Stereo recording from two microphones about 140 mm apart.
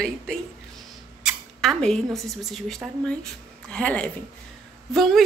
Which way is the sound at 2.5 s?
Centre (ahead or behind).